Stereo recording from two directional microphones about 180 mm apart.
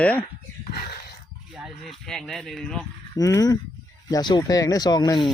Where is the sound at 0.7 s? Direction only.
60° left (ahead or behind).